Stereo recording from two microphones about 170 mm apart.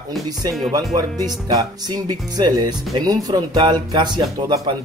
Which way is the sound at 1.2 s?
20° right (ahead or behind).